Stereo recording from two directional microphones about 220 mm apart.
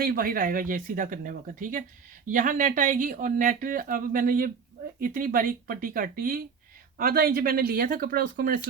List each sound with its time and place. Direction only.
0.0 s speech: 40° right (ahead or behind)